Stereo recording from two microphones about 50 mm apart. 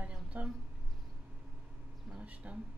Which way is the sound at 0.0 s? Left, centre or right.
Right.